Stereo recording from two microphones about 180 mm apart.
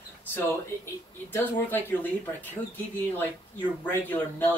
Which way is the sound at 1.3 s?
15° left (ahead or behind).